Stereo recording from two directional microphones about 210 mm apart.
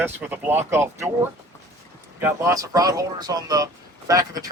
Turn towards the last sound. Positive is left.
turn(degrees=-15)  # may be behind; listen again after turning